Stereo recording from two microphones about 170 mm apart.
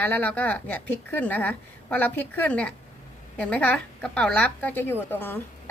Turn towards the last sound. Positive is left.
turn(degrees=10)  # may be behind; listen again after turning